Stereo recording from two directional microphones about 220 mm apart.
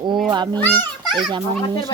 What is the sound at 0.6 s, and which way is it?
Speech, 5° left (ahead or behind).